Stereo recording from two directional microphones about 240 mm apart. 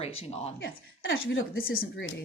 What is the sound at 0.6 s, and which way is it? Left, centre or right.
Speech, left.